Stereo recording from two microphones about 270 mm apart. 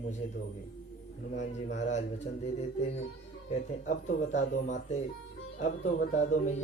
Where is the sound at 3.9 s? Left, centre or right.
Left.